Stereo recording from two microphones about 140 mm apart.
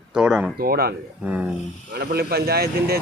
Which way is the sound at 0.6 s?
90° right.